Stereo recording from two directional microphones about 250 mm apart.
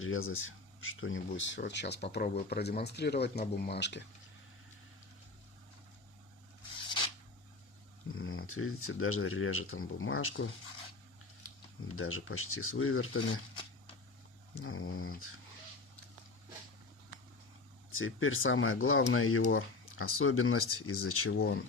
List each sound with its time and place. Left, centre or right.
0.0 s speech: left
6.8 s a sound: centre
8.1 s speech: left
11.9 s speech: left
14.5 s speech: left
17.9 s speech: left